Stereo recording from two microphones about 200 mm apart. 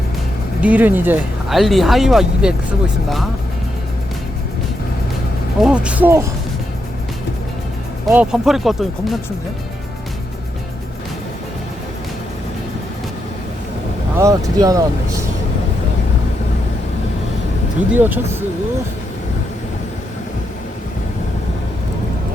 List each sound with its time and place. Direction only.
0.6 s speech: 10° right (ahead or behind)
5.6 s speech: 5° right (ahead or behind)
8.0 s speech: 5° right (ahead or behind)
14.2 s speech: 15° right (ahead or behind)
17.9 s speech: 10° right (ahead or behind)